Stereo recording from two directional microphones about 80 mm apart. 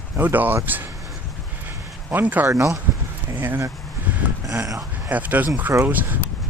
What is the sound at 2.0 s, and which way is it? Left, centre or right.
Speech, right.